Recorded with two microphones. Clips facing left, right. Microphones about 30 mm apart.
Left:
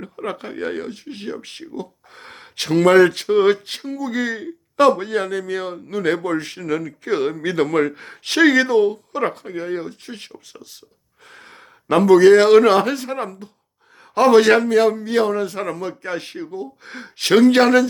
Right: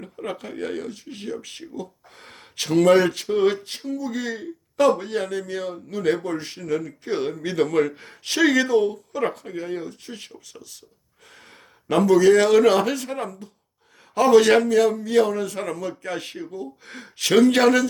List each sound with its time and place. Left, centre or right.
0.3 s speech: left
2.6 s speech: left
3.1 s speech: left
7.9 s a man's voice: left